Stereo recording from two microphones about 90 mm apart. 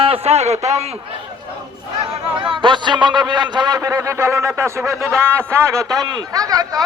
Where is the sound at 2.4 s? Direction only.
65° right (ahead or behind).